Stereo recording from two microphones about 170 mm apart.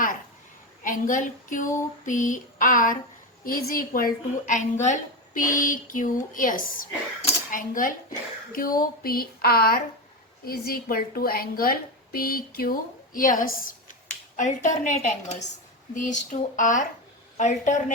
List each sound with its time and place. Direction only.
0.8 s a woman's voice: 50° left (ahead or behind)